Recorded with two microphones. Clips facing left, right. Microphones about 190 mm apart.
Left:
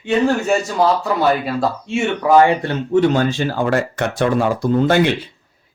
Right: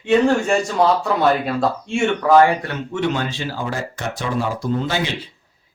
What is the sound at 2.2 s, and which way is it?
Speech, 25° left (ahead or behind).